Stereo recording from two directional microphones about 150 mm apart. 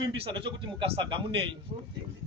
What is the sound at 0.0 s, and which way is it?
A man's voice, 30° right (ahead or behind).